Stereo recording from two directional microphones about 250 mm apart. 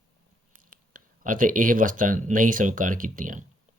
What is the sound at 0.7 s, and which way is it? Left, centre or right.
Speech, right.